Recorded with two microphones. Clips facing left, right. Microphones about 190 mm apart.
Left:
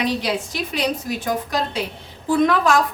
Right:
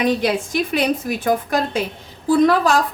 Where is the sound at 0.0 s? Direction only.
50° right (ahead or behind).